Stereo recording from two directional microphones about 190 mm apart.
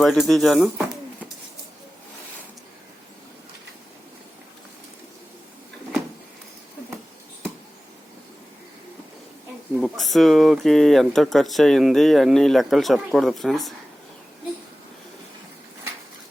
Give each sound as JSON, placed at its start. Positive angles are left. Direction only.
{"t": 0.0, "sound": "speech", "side_deg": 0}
{"t": 9.7, "sound": "speech", "side_deg": 0}